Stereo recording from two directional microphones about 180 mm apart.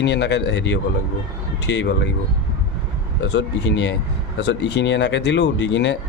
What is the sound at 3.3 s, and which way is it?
Speech, 80° left.